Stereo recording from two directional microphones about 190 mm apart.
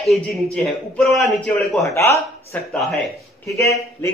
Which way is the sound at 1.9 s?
15° left (ahead or behind).